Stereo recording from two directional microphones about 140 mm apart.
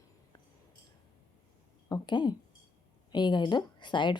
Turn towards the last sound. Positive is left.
turn(degrees=35)  # may be behind; listen again after turning